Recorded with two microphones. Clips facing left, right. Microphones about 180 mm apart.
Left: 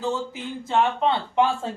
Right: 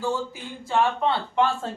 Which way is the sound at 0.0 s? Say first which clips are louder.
Left 1 dB; 20° left (ahead or behind).